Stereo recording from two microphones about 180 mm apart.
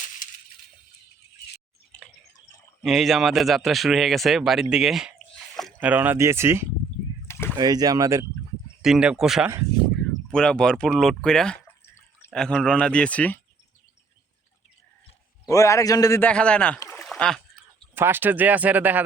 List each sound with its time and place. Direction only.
2.8 s speech: centre (ahead or behind)
5.5 s a sound: centre (ahead or behind)
5.9 s speech: 10° right (ahead or behind)
7.3 s a sound: 15° left (ahead or behind)
7.5 s speech: 20° right (ahead or behind)
8.8 s speech: 5° right (ahead or behind)
15.4 s a man's voice: 15° left (ahead or behind)
16.3 s a man's voice: 5° left (ahead or behind)
16.8 s a sound: 5° left (ahead or behind)
17.9 s speech: 10° right (ahead or behind)